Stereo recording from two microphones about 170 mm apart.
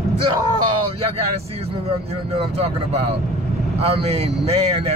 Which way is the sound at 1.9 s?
35° right (ahead or behind).